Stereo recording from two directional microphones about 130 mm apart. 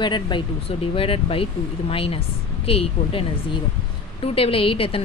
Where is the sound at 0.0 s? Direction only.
35° left (ahead or behind).